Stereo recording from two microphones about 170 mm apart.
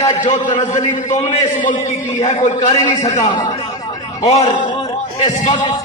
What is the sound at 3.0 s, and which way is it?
A man's voice, 40° left (ahead or behind).